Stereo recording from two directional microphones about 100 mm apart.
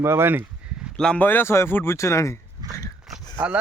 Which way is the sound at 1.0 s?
10° left (ahead or behind).